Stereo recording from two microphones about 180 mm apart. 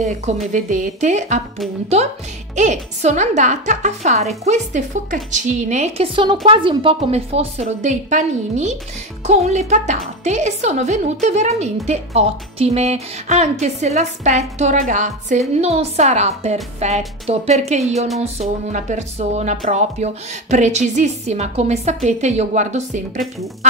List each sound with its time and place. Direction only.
0.0 s a woman's voice: 40° right (ahead or behind)
2.5 s a woman's voice: 40° right (ahead or behind)
18.0 s music: centre (ahead or behind)
18.7 s a woman's voice: 45° right (ahead or behind)